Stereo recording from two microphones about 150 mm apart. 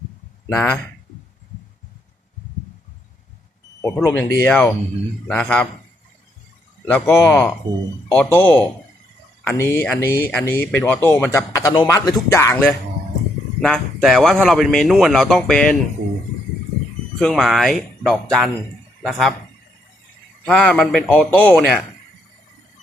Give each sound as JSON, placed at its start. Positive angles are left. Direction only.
{"t": 0.4, "sound": "speech", "side_deg": 10}
{"t": 3.8, "sound": "speech", "side_deg": 20}
{"t": 6.8, "sound": "a man's voice", "side_deg": 15}
{"t": 13.6, "sound": "speech", "side_deg": 5}
{"t": 17.2, "sound": "speech", "side_deg": 5}
{"t": 20.4, "sound": "speech", "side_deg": 5}